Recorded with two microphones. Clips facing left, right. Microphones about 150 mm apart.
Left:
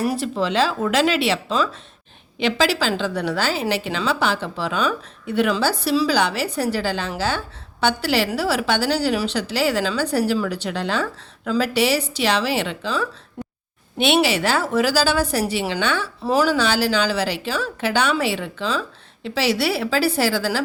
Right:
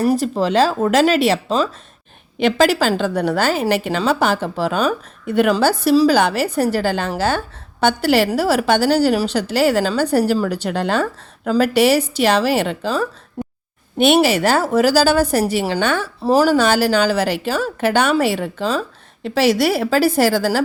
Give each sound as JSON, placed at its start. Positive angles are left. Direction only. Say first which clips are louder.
{"t": 0.0, "sound": "a woman's voice", "louder": "right 5 dB", "side_deg": -35}
{"t": 16.2, "sound": "a woman's voice", "louder": "right 5 dB", "side_deg": -35}